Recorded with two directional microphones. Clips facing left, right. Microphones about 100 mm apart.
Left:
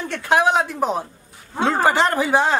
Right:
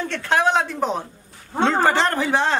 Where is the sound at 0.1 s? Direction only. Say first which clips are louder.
Left 2 dB; 10° left (ahead or behind).